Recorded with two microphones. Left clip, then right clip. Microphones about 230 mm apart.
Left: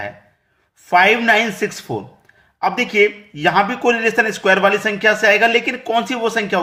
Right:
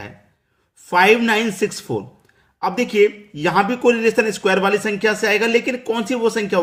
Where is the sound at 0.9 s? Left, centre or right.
Centre.